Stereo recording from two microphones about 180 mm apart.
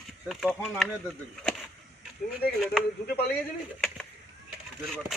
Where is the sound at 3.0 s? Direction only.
60° left (ahead or behind).